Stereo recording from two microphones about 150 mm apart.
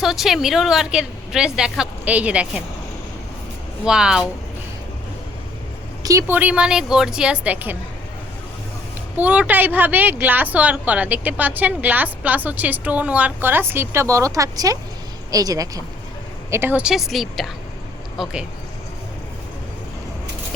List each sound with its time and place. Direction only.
0.0 s a woman's voice: centre (ahead or behind)
3.8 s a woman's voice: 5° right (ahead or behind)
6.0 s speech: 20° right (ahead or behind)
9.1 s a woman's voice: 10° right (ahead or behind)